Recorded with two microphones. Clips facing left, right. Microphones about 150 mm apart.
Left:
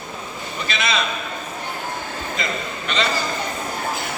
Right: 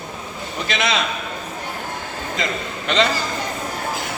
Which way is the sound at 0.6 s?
90° right.